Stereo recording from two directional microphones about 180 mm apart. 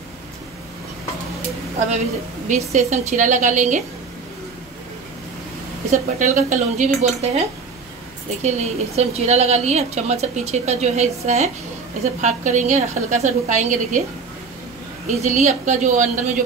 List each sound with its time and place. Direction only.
2.4 s a woman's voice: 40° right (ahead or behind)
5.9 s a woman's voice: 45° right (ahead or behind)
15.0 s a woman's voice: 40° right (ahead or behind)